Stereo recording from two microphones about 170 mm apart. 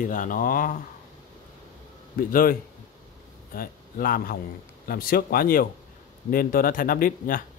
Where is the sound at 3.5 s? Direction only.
60° left (ahead or behind).